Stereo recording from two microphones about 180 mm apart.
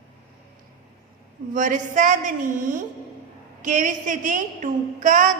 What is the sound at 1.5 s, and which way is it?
A woman's voice, 45° right (ahead or behind).